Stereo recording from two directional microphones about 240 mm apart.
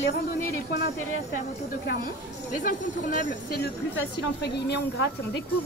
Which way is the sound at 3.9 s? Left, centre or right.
Left.